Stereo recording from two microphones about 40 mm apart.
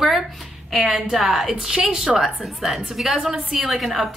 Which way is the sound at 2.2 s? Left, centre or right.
Centre.